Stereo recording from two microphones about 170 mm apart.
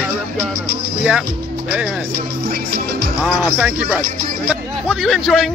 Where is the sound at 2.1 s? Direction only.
65° right (ahead or behind).